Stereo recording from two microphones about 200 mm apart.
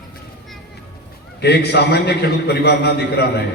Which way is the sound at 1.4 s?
55° left (ahead or behind).